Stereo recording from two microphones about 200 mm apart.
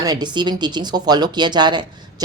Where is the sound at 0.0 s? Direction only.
20° right (ahead or behind).